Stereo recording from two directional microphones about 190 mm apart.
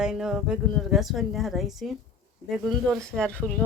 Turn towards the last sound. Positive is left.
turn(degrees=5)  # may be behind; listen again after turning